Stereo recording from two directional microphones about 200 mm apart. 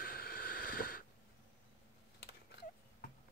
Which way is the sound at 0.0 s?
45° left (ahead or behind).